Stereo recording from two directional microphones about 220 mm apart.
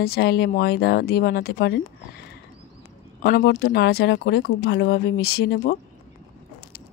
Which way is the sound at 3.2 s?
45° left (ahead or behind).